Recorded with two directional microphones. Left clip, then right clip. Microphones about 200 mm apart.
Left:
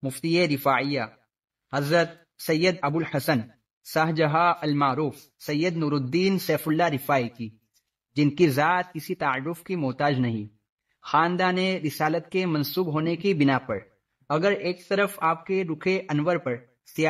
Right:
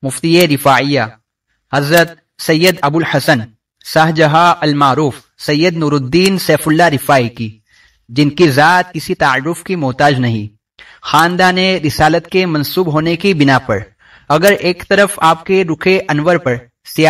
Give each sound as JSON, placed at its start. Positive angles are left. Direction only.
{"t": 0.0, "sound": "a man's voice", "side_deg": -40}